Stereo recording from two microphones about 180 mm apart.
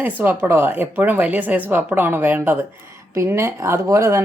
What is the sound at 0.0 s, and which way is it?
Speech, 10° right (ahead or behind).